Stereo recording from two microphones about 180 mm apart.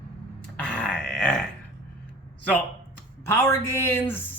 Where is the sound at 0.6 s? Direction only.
5° left (ahead or behind).